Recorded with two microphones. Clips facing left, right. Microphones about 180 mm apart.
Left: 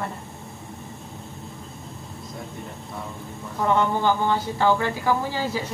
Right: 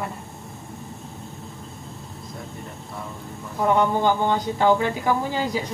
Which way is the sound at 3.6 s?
15° right (ahead or behind).